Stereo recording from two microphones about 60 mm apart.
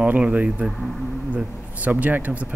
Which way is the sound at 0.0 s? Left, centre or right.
Right.